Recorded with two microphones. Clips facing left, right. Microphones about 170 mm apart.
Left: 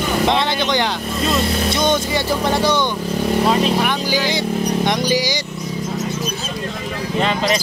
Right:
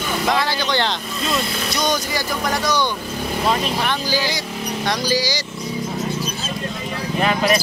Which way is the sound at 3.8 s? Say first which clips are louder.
Left 2 dB; 15° left (ahead or behind).